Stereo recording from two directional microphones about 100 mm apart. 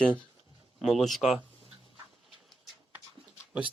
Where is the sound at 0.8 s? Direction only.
Centre (ahead or behind).